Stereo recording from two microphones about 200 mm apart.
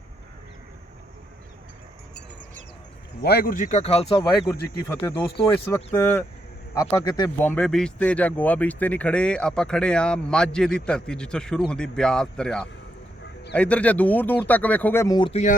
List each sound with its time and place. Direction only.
3.2 s a man's voice: 50° left (ahead or behind); by 4.3 s 25° left (ahead or behind)
5.0 s speech: 10° left (ahead or behind)
15.3 s a man's voice: 35° left (ahead or behind)